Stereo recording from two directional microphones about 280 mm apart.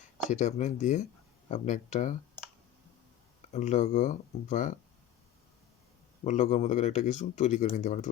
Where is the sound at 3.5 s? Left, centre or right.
Left.